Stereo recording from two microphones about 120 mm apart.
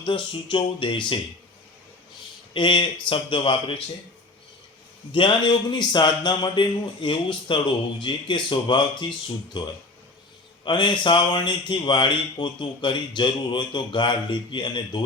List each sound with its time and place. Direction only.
0.0 s speech: 45° left (ahead or behind)
2.5 s speech: 40° left (ahead or behind)
5.1 s speech: 45° left (ahead or behind)